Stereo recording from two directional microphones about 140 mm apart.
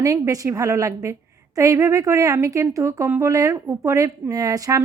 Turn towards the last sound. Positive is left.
turn(degrees=-25)  # may be behind; listen again after turning